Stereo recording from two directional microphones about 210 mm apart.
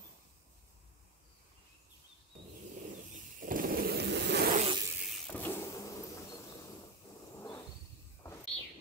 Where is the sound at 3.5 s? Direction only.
45° right (ahead or behind).